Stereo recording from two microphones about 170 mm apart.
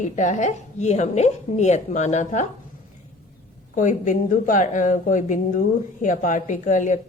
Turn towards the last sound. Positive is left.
turn(degrees=50)  # may be behind; listen again after turning